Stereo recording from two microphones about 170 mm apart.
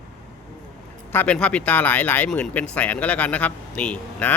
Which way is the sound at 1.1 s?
5° left (ahead or behind).